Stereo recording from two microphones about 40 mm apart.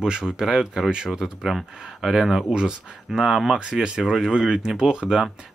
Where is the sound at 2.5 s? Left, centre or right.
Right.